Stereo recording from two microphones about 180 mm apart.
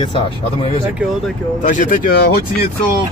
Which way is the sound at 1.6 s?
45° left (ahead or behind).